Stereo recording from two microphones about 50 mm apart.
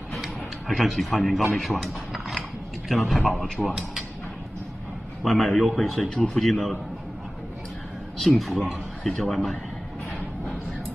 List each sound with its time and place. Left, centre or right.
0.2 s a sound: centre
2.9 s speech: centre
5.2 s speech: centre
8.4 s speech: centre